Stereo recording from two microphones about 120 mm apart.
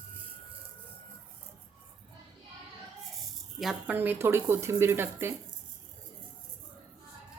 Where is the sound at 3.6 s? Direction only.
5° right (ahead or behind).